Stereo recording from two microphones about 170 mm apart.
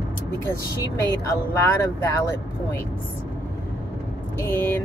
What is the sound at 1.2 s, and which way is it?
Speech, 15° left (ahead or behind).